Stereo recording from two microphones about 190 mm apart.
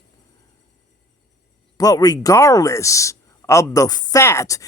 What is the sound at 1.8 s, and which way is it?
Speech, 20° left (ahead or behind).